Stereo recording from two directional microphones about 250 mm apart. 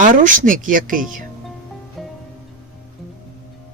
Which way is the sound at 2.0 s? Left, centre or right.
Centre.